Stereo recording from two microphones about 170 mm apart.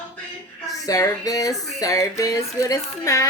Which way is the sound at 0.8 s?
20° left (ahead or behind).